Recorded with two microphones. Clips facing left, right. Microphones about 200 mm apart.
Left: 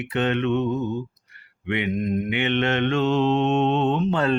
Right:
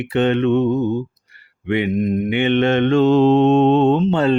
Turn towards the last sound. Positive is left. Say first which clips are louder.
# right 6 dB
turn(degrees=-30)  # may be behind; listen again after turning